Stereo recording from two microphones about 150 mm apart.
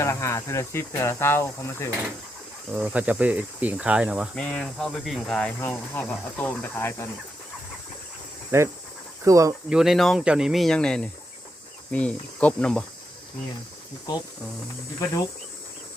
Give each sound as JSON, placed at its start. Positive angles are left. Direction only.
{"t": 0.0, "sound": "speech", "side_deg": 20}
{"t": 2.7, "sound": "speech", "side_deg": -10}
{"t": 4.4, "sound": "speech", "side_deg": 5}
{"t": 8.5, "sound": "speech", "side_deg": -15}
{"t": 9.6, "sound": "speech", "side_deg": -5}